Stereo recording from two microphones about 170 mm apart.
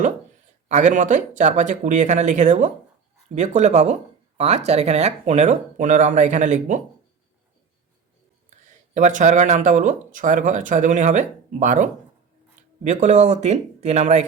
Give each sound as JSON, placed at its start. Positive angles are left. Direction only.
{"t": 0.7, "sound": "speech", "side_deg": -45}
{"t": 9.0, "sound": "speech", "side_deg": -45}